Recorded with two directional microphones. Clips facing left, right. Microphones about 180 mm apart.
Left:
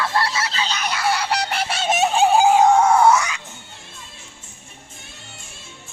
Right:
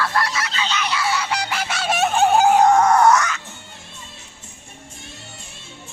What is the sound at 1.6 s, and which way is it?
Fowl, 25° left (ahead or behind).